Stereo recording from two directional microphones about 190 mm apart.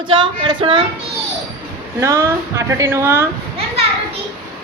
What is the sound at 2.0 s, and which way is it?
Speech, 15° right (ahead or behind).